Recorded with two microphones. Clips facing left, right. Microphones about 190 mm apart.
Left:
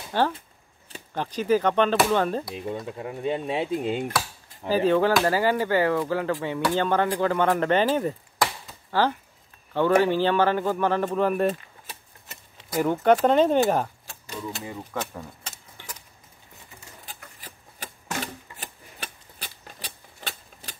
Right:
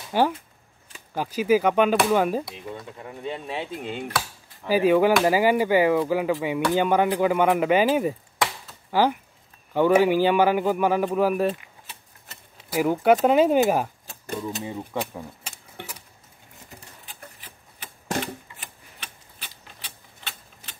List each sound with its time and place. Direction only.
0.1 s speech: 10° right (ahead or behind)
2.5 s speech: 25° left (ahead or behind)
4.6 s speech: 10° right (ahead or behind)
12.7 s speech: 5° right (ahead or behind)
14.8 s speech: 10° right (ahead or behind)
15.8 s keys jangling: 60° right (ahead or behind)
17.0 s a sound: 40° left (ahead or behind)
18.2 s typewriter: 40° left (ahead or behind)